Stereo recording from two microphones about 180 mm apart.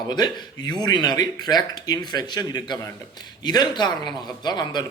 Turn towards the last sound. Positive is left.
turn(degrees=25)  # may be behind; listen again after turning